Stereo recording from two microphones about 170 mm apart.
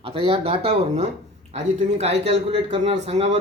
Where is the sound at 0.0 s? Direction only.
30° right (ahead or behind).